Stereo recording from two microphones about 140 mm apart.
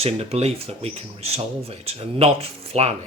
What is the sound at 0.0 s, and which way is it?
A man's voice, 45° right (ahead or behind).